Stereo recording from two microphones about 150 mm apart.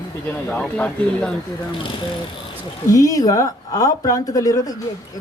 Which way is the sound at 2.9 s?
25° left (ahead or behind).